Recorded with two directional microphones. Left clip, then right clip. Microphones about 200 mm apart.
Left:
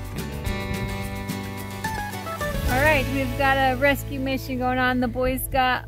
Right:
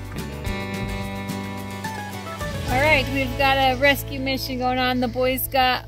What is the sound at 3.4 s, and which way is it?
Speech, 25° right (ahead or behind).